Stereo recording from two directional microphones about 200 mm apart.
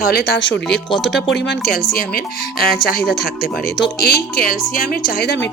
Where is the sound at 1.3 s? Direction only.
55° left (ahead or behind).